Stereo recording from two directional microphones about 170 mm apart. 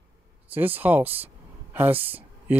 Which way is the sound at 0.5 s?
10° right (ahead or behind).